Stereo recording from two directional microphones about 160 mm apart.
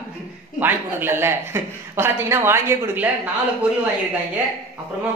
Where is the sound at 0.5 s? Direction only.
15° right (ahead or behind).